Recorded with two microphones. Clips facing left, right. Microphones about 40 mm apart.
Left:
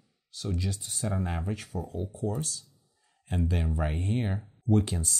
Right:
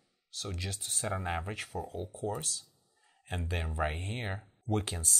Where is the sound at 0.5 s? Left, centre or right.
Right.